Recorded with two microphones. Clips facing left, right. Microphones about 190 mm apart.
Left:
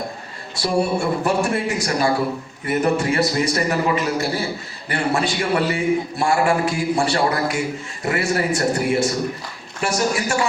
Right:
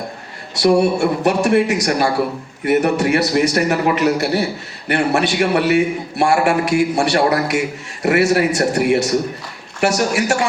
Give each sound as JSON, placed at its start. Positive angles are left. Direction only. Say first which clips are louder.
{"t": 0.6, "sound": "a man's voice", "louder": "right 6 dB", "side_deg": -75}